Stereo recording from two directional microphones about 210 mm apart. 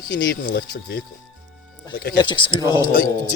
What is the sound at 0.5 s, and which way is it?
Speech, 55° left (ahead or behind).